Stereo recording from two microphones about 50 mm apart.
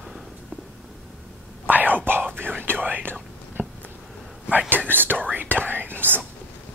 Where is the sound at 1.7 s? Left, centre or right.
Right.